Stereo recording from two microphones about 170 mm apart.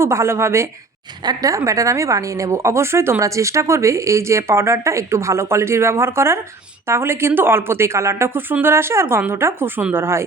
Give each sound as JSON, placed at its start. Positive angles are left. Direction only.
{"t": 0.0, "sound": "speech", "side_deg": -15}